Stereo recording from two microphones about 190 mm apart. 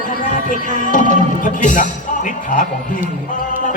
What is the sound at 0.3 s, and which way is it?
A man's voice, 45° left (ahead or behind).